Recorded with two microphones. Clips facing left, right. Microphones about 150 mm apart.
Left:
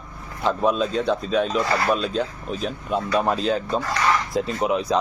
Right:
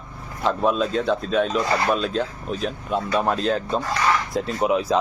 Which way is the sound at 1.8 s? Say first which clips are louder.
Even; centre (ahead or behind).